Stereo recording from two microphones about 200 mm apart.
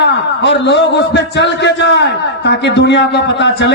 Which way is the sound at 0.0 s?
60° left (ahead or behind).